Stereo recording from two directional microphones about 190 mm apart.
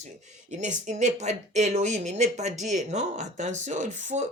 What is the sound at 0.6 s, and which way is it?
Speech, 40° right (ahead or behind).